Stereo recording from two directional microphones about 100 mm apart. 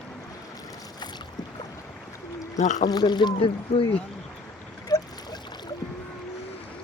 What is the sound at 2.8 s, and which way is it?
Speech, 45° left (ahead or behind).